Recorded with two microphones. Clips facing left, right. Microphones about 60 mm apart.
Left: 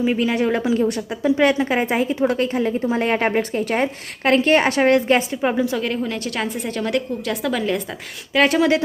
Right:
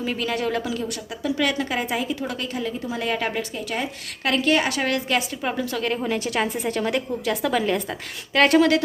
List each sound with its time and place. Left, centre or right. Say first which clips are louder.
0.0 s speech: left 6 dB; centre
6.0 s a woman's voice: even; centre